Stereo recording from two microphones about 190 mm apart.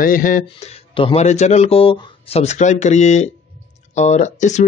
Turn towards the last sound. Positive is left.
turn(degrees=40)  # may be behind; listen again after turning